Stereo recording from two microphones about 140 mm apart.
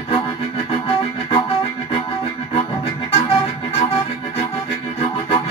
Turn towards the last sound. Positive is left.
turn(degrees=45)  # may be behind; listen again after turning